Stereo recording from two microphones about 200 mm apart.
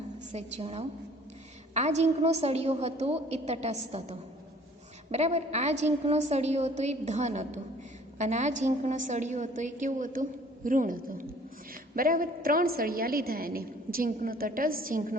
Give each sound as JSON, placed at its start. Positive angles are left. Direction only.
{"t": 0.3, "sound": "a woman's voice", "side_deg": -30}